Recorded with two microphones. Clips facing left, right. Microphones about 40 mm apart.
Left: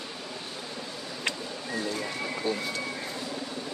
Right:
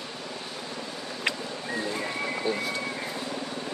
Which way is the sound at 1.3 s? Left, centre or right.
Centre.